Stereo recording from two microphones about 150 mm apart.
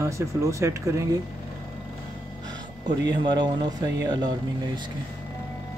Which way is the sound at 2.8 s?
30° right (ahead or behind).